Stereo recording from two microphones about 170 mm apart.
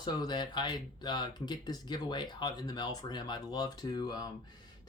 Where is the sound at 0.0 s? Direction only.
25° left (ahead or behind).